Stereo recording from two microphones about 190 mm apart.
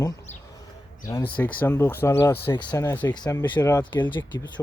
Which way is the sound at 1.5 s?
10° left (ahead or behind).